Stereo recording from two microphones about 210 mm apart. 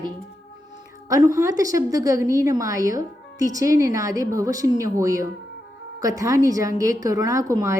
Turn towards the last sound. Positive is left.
turn(degrees=-15)  # may be behind; listen again after turning